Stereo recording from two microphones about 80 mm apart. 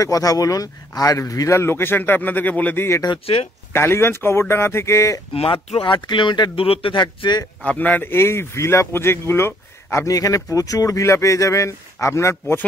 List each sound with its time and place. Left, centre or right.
0.0 s speech: left; by 2.8 s centre
3.7 s speech: left
5.5 s speech: left
7.6 s speech: centre
9.8 s speech: left